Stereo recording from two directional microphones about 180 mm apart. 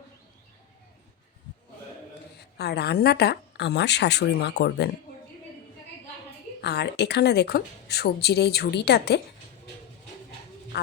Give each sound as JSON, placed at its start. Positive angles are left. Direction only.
{"t": 2.6, "sound": "a woman's voice", "side_deg": 65}
{"t": 6.6, "sound": "a woman's voice", "side_deg": 65}